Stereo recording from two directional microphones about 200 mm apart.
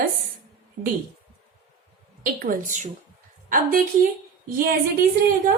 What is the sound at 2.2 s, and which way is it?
A woman's voice, 40° right (ahead or behind).